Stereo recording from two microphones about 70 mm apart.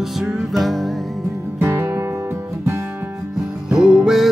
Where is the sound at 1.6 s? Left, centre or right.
Right.